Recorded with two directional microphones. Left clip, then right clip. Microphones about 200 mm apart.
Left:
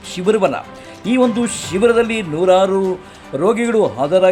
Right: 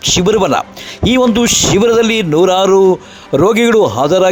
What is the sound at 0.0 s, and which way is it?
Speech, 40° right (ahead or behind).